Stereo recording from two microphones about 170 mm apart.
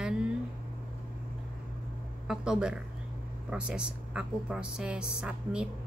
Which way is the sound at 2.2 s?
5° right (ahead or behind).